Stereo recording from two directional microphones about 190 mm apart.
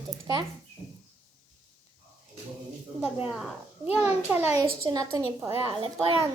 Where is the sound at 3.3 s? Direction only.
Centre (ahead or behind).